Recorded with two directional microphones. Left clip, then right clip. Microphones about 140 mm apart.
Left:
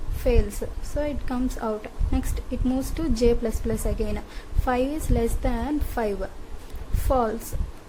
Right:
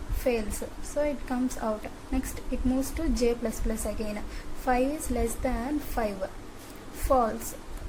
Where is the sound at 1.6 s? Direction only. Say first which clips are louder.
Left 2 dB; 50° left (ahead or behind).